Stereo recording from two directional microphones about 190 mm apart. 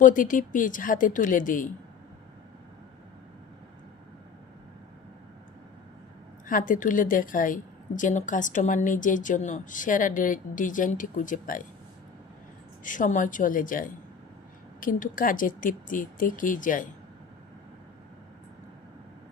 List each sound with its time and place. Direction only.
0.0 s a woman's voice: 45° left (ahead or behind)
6.5 s a woman's voice: 45° left (ahead or behind)
12.8 s a woman's voice: 45° left (ahead or behind)